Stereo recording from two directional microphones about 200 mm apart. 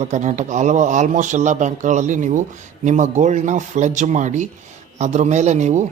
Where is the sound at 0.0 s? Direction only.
35° right (ahead or behind).